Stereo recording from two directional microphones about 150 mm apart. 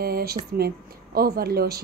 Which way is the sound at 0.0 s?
90° right.